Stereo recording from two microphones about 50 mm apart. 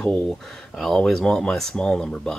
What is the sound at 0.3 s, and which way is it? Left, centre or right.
Speech, centre.